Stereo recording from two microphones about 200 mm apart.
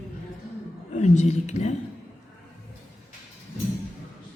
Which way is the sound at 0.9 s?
35° left (ahead or behind).